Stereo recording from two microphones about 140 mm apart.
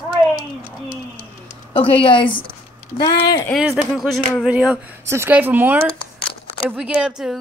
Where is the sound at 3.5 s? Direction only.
Centre (ahead or behind).